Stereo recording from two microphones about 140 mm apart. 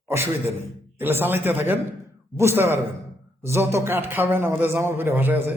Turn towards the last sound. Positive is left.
turn(degrees=-15)  # may be behind; listen again after turning